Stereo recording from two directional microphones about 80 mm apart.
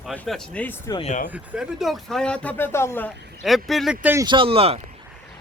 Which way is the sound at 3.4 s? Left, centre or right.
Centre.